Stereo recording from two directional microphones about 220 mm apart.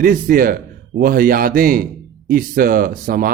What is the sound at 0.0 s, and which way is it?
Speech, 40° right (ahead or behind).